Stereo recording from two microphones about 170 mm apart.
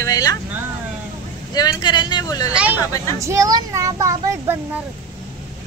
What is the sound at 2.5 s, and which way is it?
Speech, 10° right (ahead or behind).